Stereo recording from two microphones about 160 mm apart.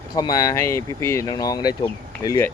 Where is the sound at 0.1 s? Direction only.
25° left (ahead or behind).